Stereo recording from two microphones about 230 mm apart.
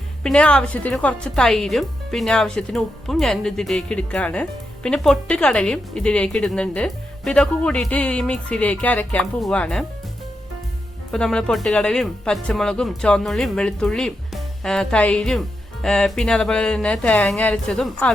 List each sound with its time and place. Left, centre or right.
0.2 s speech: centre
11.1 s speech: centre